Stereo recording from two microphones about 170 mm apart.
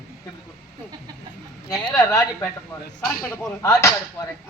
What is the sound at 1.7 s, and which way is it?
Speech, 10° left (ahead or behind).